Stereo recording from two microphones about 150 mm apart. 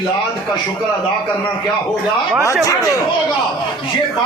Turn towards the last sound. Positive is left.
turn(degrees=20)  # may be behind; listen again after turning